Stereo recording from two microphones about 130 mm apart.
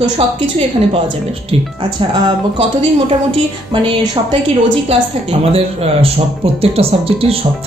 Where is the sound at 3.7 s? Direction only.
40° right (ahead or behind).